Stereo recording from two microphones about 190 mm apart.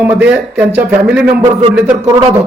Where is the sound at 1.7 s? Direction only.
5° right (ahead or behind).